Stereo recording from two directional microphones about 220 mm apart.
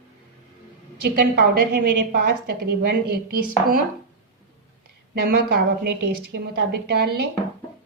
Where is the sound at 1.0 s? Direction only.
45° right (ahead or behind).